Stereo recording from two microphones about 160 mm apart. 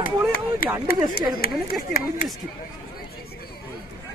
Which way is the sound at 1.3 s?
70° left (ahead or behind).